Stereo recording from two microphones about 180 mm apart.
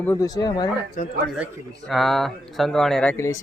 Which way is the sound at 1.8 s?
Centre (ahead or behind).